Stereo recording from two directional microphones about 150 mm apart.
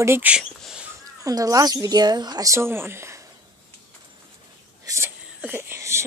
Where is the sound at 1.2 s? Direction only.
25° right (ahead or behind).